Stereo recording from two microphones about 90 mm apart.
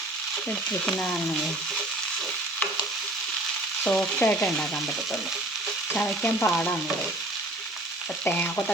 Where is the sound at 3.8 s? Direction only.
15° left (ahead or behind).